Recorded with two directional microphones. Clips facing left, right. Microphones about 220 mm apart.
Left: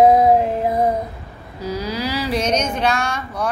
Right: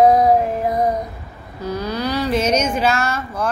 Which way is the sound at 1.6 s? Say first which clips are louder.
Right 1 dB; 10° left (ahead or behind).